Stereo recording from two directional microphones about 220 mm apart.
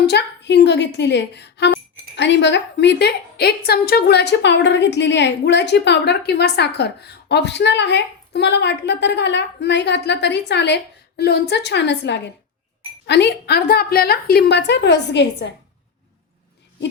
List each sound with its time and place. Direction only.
0.0 s a woman's voice: 50° left (ahead or behind)